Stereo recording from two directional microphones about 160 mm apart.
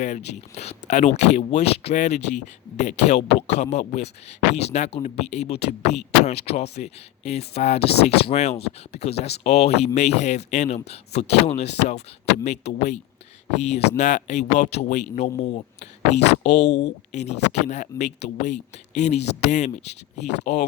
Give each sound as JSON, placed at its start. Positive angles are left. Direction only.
{"t": 0.0, "sound": "speech", "side_deg": 45}
{"t": 16.5, "sound": "speech", "side_deg": 90}
{"t": 17.1, "sound": "speech", "side_deg": 45}